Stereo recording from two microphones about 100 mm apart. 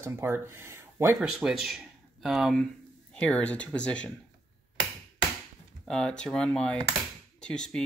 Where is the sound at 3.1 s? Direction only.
10° left (ahead or behind).